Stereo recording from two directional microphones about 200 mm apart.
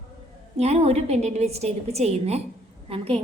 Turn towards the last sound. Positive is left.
turn(degrees=-30)  # may be behind; listen again after turning